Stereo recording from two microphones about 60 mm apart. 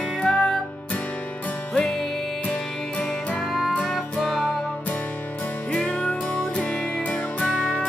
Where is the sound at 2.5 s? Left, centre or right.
Left.